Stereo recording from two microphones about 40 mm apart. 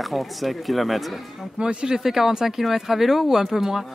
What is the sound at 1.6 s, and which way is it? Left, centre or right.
Speech, right.